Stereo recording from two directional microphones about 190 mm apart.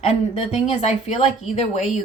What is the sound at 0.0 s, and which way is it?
Speech, 35° left (ahead or behind).